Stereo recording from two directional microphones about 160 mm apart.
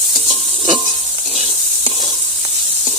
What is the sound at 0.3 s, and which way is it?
Stir, 35° right (ahead or behind).